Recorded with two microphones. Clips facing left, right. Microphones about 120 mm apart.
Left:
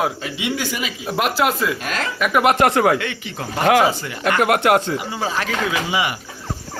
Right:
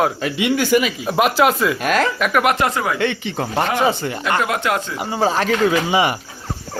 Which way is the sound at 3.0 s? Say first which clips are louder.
Right 7 dB; 30° right (ahead or behind).